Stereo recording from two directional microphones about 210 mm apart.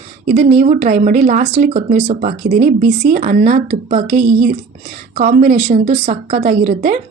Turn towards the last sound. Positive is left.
turn(degrees=-40)  # may be behind; listen again after turning